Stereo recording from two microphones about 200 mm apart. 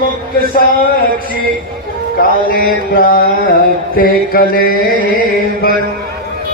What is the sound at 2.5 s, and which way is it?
Mantra, 45° left (ahead or behind).